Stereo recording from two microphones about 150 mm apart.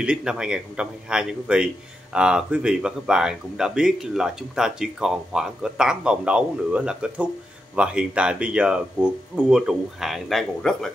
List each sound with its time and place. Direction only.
0.0 s speech: 5° right (ahead or behind)